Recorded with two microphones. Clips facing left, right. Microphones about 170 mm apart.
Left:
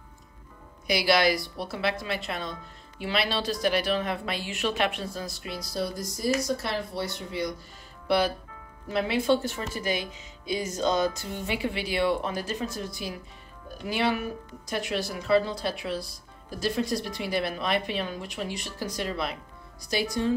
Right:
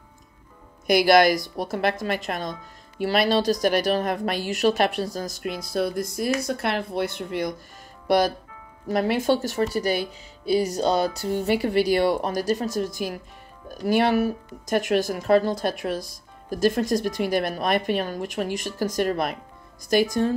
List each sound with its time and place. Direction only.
0.8 s speech: 50° right (ahead or behind)
8.1 s speech: 45° right (ahead or behind)